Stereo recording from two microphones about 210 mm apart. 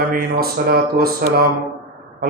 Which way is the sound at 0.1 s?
45° right (ahead or behind).